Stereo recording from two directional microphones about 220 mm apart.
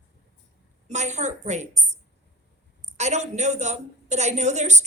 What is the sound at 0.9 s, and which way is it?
A woman's voice, 30° right (ahead or behind).